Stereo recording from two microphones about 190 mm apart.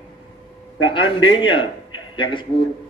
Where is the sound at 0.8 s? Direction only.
25° left (ahead or behind).